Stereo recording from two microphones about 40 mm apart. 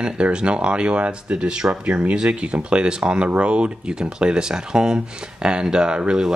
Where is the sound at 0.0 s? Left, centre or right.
Right.